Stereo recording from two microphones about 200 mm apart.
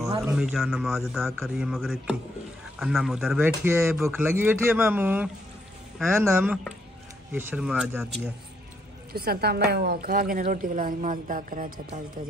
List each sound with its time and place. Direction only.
0.2 s a man's voice: 5° right (ahead or behind)
9.1 s speech: 50° right (ahead or behind)